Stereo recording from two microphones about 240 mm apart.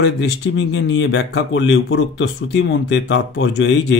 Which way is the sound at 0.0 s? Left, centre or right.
Left.